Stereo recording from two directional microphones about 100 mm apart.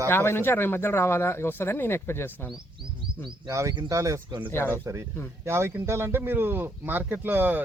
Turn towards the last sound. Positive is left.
turn(degrees=-20)  # may be behind; listen again after turning